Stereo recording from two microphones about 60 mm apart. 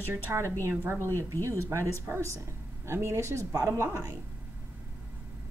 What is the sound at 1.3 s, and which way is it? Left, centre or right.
A woman's voice, right.